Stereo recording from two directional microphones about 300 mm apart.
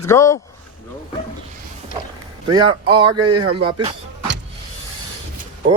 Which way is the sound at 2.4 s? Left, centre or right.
Centre.